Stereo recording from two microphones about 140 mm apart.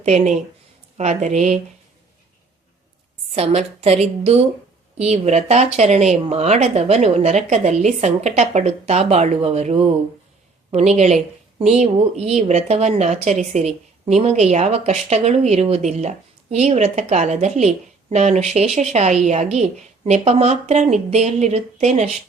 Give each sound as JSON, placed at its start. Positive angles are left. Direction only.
{"t": 0.0, "sound": "a woman's voice", "side_deg": -55}
{"t": 3.3, "sound": "a woman's voice", "side_deg": -45}